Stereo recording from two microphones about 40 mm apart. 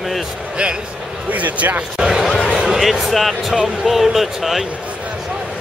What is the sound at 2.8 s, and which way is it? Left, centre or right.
Speech, centre.